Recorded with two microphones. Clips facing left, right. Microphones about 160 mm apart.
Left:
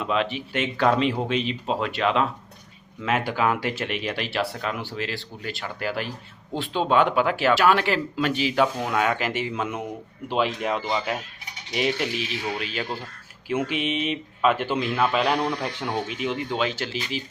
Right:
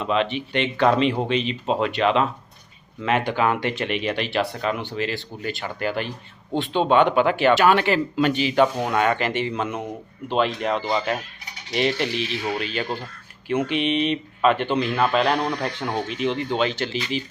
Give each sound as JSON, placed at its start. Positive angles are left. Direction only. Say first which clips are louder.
{"t": 0.0, "sound": "speech", "louder": "right 2 dB", "side_deg": 5}